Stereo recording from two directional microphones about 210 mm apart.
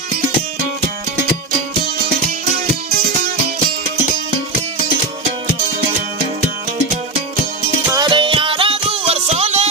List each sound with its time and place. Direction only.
7.9 s music: 20° right (ahead or behind)